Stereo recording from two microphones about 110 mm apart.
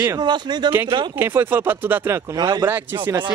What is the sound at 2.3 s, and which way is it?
Speech, 40° right (ahead or behind).